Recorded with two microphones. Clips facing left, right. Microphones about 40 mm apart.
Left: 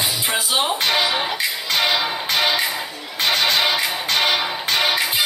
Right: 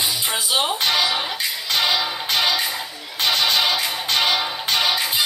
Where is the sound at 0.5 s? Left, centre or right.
Centre.